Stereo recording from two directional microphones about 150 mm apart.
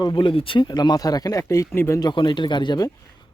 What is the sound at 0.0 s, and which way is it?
Speech, 30° left (ahead or behind).